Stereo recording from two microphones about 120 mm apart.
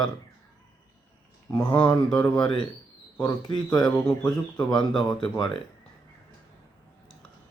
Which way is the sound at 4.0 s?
10° left (ahead or behind).